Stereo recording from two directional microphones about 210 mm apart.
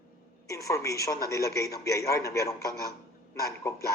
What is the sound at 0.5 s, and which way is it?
A man's voice, 15° left (ahead or behind).